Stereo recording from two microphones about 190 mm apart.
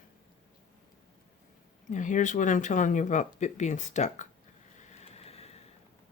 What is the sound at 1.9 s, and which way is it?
Speech, 40° left (ahead or behind).